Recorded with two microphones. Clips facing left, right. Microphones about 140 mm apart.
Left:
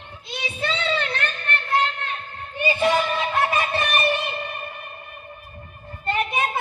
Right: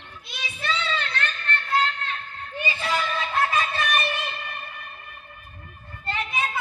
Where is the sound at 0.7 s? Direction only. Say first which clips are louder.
Left 1 dB; 25° left (ahead or behind).